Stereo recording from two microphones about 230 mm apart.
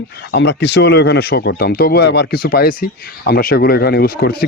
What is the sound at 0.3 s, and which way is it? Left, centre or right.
Speech, left.